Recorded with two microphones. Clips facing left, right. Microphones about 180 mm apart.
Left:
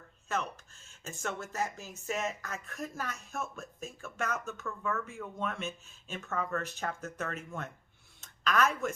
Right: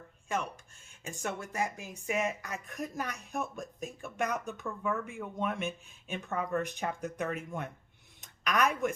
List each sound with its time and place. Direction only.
0.3 s a woman's voice: 10° right (ahead or behind)